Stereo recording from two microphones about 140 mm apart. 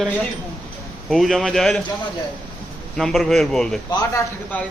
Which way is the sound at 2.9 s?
Centre (ahead or behind).